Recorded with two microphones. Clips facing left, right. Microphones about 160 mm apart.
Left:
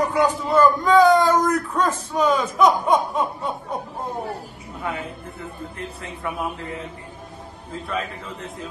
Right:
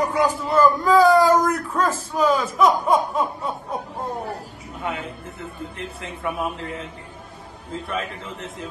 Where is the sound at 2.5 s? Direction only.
5° right (ahead or behind).